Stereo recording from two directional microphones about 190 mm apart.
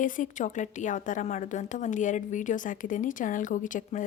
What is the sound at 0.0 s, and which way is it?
A woman's voice, 40° left (ahead or behind).